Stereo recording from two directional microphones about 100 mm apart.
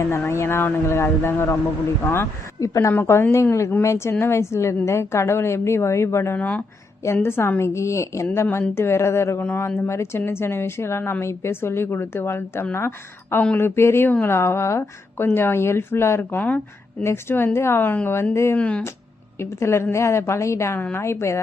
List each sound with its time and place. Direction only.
0.0 s a woman's voice: 25° left (ahead or behind)
7.0 s a woman's voice: 25° left (ahead or behind)
19.4 s a woman's voice: 25° left (ahead or behind)